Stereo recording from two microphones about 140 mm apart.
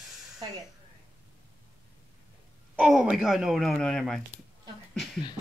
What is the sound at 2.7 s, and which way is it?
Speech, 5° right (ahead or behind).